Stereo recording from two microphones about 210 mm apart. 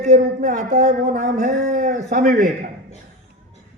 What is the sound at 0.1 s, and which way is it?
A man's voice, 35° right (ahead or behind).